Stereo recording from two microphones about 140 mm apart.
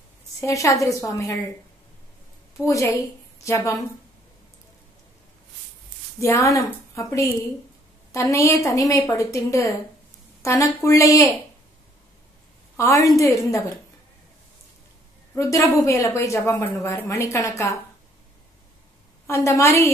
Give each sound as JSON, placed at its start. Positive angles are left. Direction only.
{"t": 0.4, "sound": "a woman's voice", "side_deg": 20}
{"t": 2.6, "sound": "a woman's voice", "side_deg": 25}
{"t": 6.1, "sound": "a woman's voice", "side_deg": 20}
{"t": 12.7, "sound": "a woman's voice", "side_deg": 20}
{"t": 15.3, "sound": "a woman's voice", "side_deg": 20}
{"t": 19.2, "sound": "a woman's voice", "side_deg": 20}